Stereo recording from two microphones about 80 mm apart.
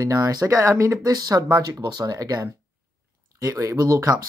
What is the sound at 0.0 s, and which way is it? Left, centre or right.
Speech, right.